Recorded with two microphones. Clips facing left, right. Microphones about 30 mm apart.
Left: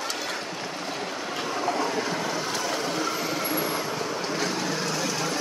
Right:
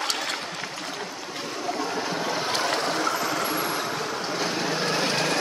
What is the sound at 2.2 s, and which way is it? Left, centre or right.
Boat, right.